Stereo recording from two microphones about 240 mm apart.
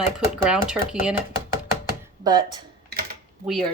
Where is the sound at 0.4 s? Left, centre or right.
Centre.